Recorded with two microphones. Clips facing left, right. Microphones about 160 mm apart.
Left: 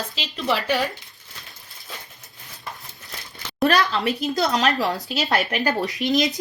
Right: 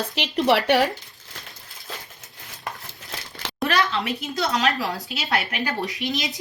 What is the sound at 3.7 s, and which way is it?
Speech, 35° left (ahead or behind).